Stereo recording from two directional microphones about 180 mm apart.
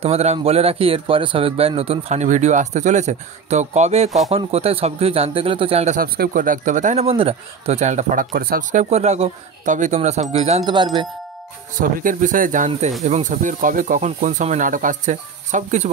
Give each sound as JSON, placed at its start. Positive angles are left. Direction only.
{"t": 0.0, "sound": "a man's voice", "side_deg": -35}
{"t": 5.9, "sound": "a man's voice", "side_deg": -55}
{"t": 10.7, "sound": "speech", "side_deg": -25}
{"t": 11.8, "sound": "a man's voice", "side_deg": -50}